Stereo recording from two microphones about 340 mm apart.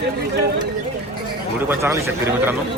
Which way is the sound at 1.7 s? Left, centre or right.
Centre.